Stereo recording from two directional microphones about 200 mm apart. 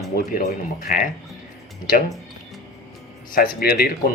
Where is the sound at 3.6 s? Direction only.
50° left (ahead or behind).